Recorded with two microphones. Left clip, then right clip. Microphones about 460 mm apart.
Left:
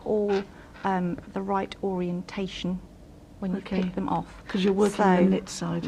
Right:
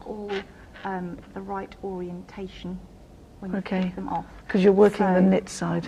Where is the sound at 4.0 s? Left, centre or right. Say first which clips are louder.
Left 1 dB; left.